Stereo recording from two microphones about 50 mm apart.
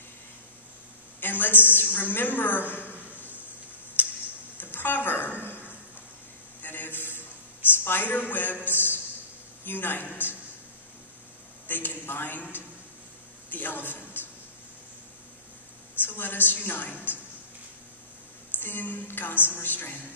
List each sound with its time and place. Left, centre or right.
1.2 s a woman's voice: left
2.8 s a sound: left
4.0 s tick-tock: left
4.6 s a sound: left
6.6 s a sound: left
7.8 s a woman's voice: left
11.6 s a woman's voice: left
16.1 s a woman's voice: left
18.6 s a woman's voice: left